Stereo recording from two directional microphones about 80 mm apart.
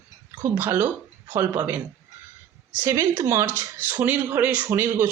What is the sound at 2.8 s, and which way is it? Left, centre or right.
Speech, right.